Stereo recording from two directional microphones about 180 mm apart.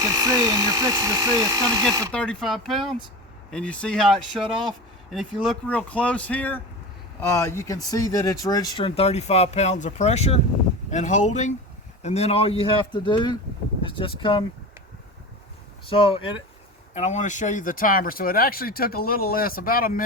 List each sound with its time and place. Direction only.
0.0 s speech: 20° right (ahead or behind)
2.1 s speech: 5° left (ahead or behind); by 14.4 s 30° left (ahead or behind)
15.9 s speech: 30° left (ahead or behind)
16.9 s speech: 40° left (ahead or behind)